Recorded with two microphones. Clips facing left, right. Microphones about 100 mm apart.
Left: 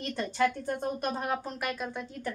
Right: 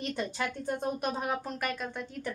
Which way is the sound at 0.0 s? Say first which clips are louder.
Left 5 dB; 5° right (ahead or behind).